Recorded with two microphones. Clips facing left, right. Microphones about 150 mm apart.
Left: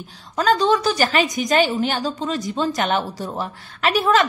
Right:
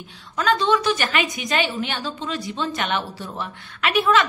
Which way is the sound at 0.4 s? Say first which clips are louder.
Left 3 dB; 40° left (ahead or behind).